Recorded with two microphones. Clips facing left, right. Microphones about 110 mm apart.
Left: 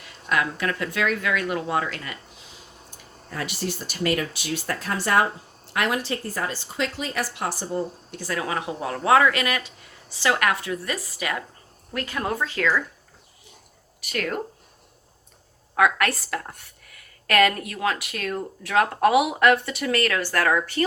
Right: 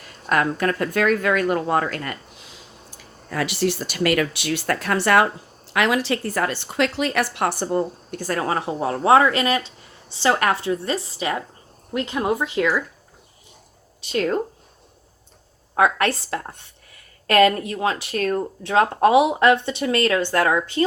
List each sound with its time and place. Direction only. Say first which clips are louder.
0.0 s speech: right 4 dB; 45° right (ahead or behind)
2.4 s speech: right 2 dB; 85° right; by 5.3 s 70° right (ahead or behind)
5.7 s a woman's voice: right 5 dB; 90° right; by 12.8 s 15° right (ahead or behind)
14.0 s speech: right 6 dB; 25° right (ahead or behind)
15.7 s speech: right 2 dB; 30° right (ahead or behind)